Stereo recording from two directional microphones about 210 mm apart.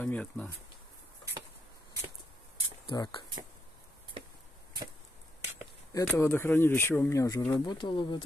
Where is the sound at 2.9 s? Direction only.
25° left (ahead or behind).